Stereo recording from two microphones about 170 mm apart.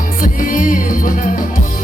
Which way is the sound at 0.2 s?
55° left (ahead or behind).